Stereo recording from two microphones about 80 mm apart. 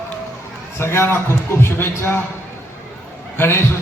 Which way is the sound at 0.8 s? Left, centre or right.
Left.